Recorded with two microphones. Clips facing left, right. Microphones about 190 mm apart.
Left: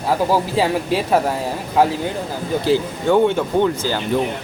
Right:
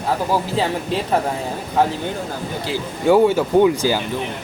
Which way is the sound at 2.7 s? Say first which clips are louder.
Left 9 dB; 40° left (ahead or behind).